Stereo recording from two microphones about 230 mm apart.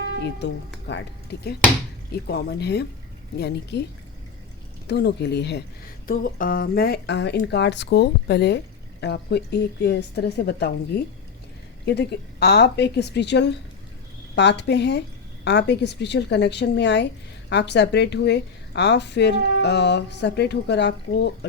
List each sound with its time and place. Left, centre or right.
0.2 s a woman's voice: left
2.1 s a woman's voice: left
4.9 s a woman's voice: left
11.9 s a woman's voice: left